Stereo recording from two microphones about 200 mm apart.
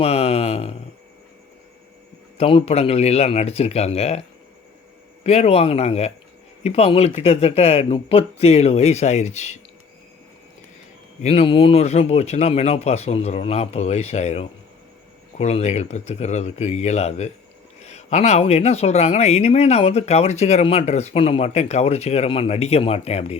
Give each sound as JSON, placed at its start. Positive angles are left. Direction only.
{"t": 0.0, "sound": "speech", "side_deg": 30}
{"t": 2.4, "sound": "speech", "side_deg": 30}
{"t": 5.2, "sound": "speech", "side_deg": 30}
{"t": 11.2, "sound": "speech", "side_deg": 30}